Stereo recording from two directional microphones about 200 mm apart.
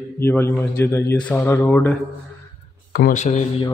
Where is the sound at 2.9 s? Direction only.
45° left (ahead or behind).